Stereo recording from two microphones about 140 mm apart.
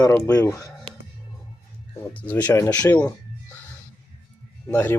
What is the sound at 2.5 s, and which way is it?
Speech, 20° left (ahead or behind).